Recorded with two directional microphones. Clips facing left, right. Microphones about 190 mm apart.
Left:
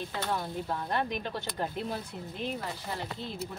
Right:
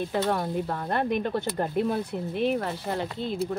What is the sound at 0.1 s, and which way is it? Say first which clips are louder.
Speech: right 7 dB; 60° right (ahead or behind).